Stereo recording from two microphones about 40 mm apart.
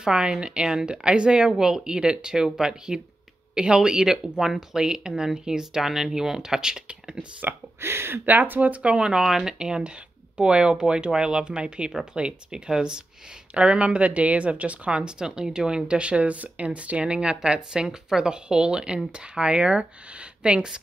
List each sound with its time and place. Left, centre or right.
0.0 s speech: right
7.8 s speech: right
8.3 s speech: right
9.1 s speech: centre
13.6 s speech: right
15.0 s speech: right